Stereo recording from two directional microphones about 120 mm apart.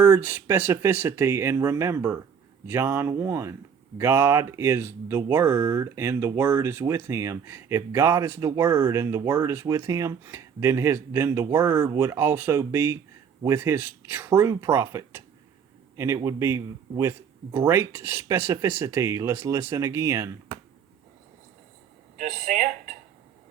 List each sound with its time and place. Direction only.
0.0 s speech: 15° right (ahead or behind)
22.2 s speech: 90° right